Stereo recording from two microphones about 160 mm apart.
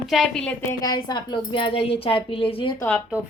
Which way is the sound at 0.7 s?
25° left (ahead or behind).